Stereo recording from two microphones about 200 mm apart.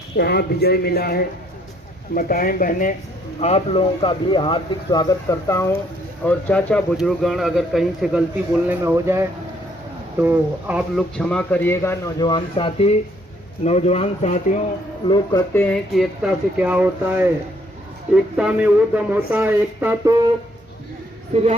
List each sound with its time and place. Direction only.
0.2 s speech: 55° left (ahead or behind)
3.4 s speech: 30° left (ahead or behind); by 11.0 s 5° right (ahead or behind)
11.1 s a man's voice: 5° left (ahead or behind); by 14.6 s 35° left (ahead or behind)
15.0 s speech: 20° left (ahead or behind); by 17.2 s 10° right (ahead or behind)
18.3 s speech: 5° right (ahead or behind)
21.3 s speech: 30° right (ahead or behind)